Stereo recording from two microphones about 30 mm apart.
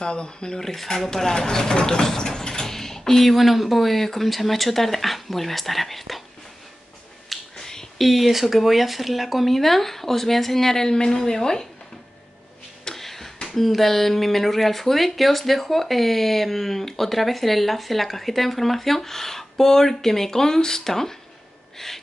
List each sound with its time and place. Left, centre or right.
0.0 s speech: left
0.6 s speech: centre
3.3 s speech: centre
7.3 s finger snapping: centre
7.6 s a sound: centre
8.0 s speech: centre
10.9 s a woman's voice: left
12.8 s a sound: centre
13.5 s speech: centre
21.7 s gasp: centre